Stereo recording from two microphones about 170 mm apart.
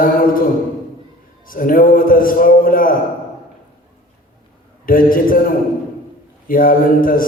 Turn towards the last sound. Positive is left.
turn(degrees=55)  # may be behind; listen again after turning